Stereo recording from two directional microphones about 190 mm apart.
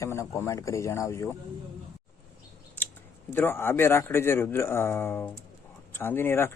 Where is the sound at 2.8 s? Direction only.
10° left (ahead or behind).